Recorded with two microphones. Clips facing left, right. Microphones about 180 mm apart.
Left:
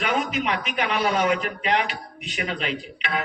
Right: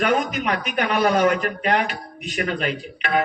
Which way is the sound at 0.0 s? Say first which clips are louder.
Right 4 dB; 50° right (ahead or behind).